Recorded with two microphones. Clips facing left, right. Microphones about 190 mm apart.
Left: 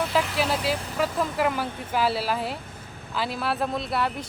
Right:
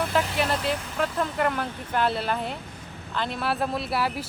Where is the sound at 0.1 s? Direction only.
Centre (ahead or behind).